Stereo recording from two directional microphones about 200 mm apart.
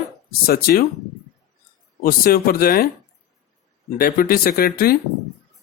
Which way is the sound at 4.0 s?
45° left (ahead or behind).